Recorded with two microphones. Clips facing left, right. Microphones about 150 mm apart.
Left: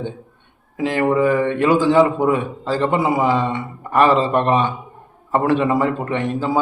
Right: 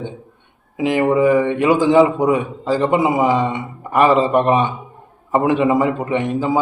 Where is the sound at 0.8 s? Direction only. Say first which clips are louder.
Right 2 dB; 15° right (ahead or behind).